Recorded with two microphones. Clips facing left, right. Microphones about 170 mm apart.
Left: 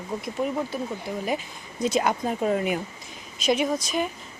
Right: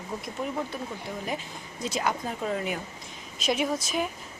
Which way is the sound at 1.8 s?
20° left (ahead or behind).